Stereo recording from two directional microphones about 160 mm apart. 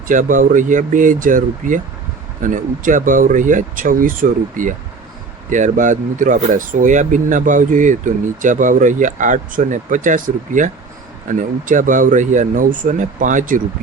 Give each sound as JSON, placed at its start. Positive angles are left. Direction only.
{"t": 0.1, "sound": "speech", "side_deg": -55}